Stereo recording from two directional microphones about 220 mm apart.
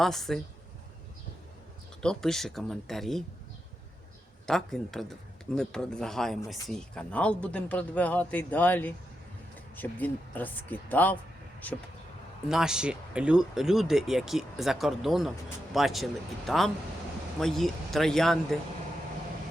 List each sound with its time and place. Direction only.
0.0 s speech: centre (ahead or behind)
2.0 s speech: 5° left (ahead or behind)
4.4 s speech: centre (ahead or behind)